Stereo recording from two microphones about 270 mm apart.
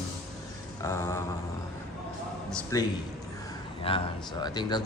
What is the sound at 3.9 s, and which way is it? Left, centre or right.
Speech, centre.